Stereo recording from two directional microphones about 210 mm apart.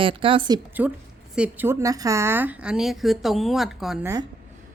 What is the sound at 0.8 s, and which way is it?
A woman's voice, 10° right (ahead or behind).